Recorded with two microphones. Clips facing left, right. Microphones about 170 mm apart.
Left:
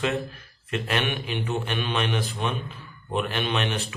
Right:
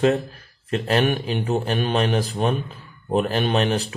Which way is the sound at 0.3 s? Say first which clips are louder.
Right 5 dB; 35° right (ahead or behind).